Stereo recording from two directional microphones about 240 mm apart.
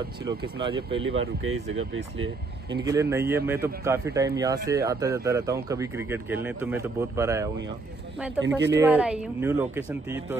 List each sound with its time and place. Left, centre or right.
0.2 s speech: centre
1.0 s speech: right
2.7 s speech: centre
8.7 s speech: centre